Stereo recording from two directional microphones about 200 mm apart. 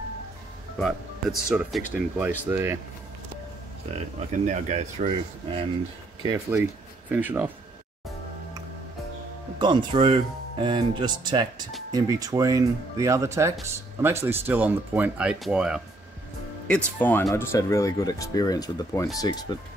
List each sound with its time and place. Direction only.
1.5 s speech: 5° right (ahead or behind)
3.9 s speech: 35° right (ahead or behind)
6.2 s speech: 15° right (ahead or behind)
9.6 s speech: 25° right (ahead or behind); by 19.5 s 20° left (ahead or behind)